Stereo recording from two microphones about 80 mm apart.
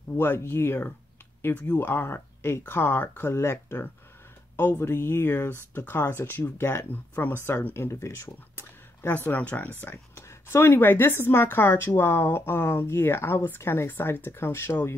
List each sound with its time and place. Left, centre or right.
0.2 s speech: left
10.1 s speech: left